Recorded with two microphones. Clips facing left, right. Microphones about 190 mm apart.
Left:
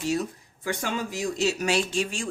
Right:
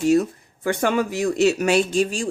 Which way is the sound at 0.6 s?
60° right (ahead or behind).